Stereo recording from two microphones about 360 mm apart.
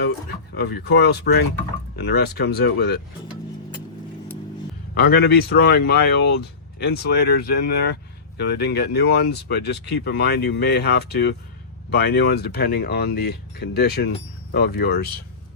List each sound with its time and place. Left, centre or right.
0.5 s speech: left
5.1 s speech: left